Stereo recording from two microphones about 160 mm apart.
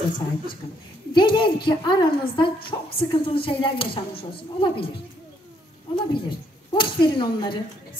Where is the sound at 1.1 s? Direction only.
30° left (ahead or behind).